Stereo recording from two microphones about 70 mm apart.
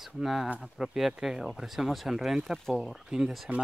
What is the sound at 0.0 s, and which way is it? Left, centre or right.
Speech, centre.